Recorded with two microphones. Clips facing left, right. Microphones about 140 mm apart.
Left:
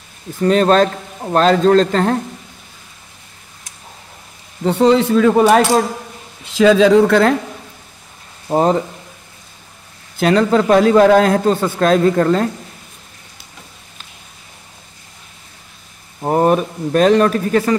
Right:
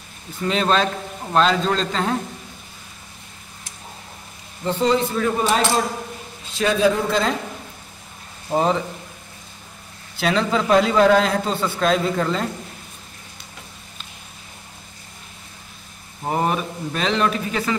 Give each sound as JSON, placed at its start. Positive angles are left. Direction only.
{"t": 0.4, "sound": "a man's voice", "side_deg": 45}
{"t": 4.6, "sound": "speech", "side_deg": 70}
{"t": 6.4, "sound": "speech", "side_deg": 90}
{"t": 8.5, "sound": "a man's voice", "side_deg": 40}
{"t": 10.1, "sound": "a man's voice", "side_deg": 50}
{"t": 16.3, "sound": "a man's voice", "side_deg": 45}